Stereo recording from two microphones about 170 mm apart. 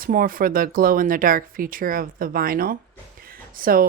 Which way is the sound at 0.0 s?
55° right (ahead or behind).